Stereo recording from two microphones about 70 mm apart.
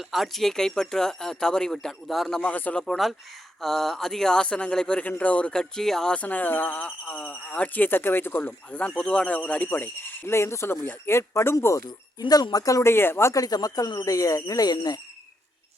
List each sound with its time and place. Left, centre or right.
0.1 s speech: centre
2.4 s speech: left
2.8 s speech: centre
6.1 s speech: left
9.6 s speech: left
11.9 s speech: left
12.8 s speech: left
13.3 s speech: left